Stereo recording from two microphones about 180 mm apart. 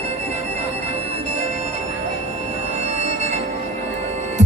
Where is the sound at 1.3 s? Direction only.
40° right (ahead or behind).